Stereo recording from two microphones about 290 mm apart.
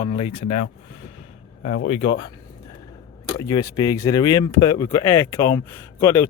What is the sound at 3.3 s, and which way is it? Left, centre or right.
Speech, centre.